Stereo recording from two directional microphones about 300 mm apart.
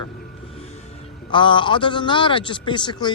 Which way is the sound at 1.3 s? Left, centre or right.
Centre.